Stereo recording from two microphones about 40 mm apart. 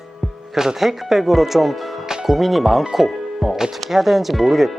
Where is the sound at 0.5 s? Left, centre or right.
Centre.